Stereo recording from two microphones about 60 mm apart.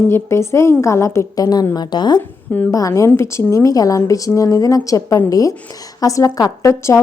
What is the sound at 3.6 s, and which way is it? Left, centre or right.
Speech, left.